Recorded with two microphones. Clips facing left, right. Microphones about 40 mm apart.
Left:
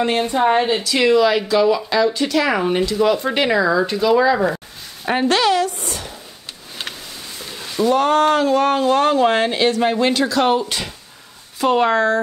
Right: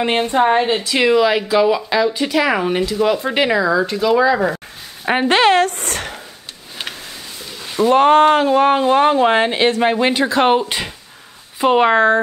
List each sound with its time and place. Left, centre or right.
0.3 s speech: right; by 4.6 s centre
5.0 s speech: right
5.4 s speech: right
7.7 s speech: right